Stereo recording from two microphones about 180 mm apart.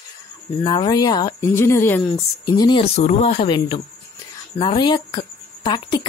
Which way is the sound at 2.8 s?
35° left (ahead or behind).